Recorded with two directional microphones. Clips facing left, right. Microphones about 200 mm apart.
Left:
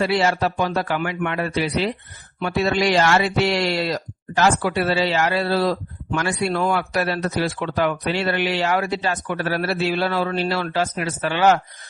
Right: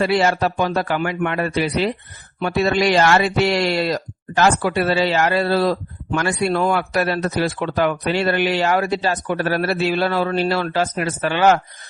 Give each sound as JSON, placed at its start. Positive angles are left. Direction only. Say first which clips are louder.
{"t": 0.0, "sound": "speech", "louder": "right 2 dB", "side_deg": -50}